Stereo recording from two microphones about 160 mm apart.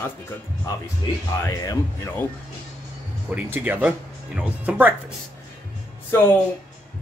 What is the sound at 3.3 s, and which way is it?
Speech, 10° right (ahead or behind).